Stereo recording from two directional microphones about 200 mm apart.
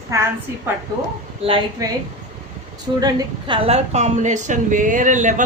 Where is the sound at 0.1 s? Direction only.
15° right (ahead or behind).